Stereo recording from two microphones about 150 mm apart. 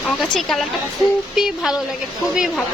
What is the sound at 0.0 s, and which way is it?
A woman's voice, centre (ahead or behind).